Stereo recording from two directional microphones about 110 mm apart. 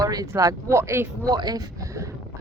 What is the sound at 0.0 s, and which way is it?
Speech, 35° right (ahead or behind).